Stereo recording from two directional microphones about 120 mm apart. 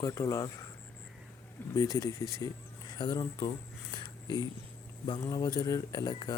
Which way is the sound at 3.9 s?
40° left (ahead or behind).